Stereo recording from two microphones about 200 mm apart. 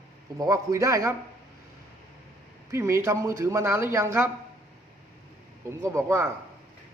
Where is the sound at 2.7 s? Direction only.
15° right (ahead or behind).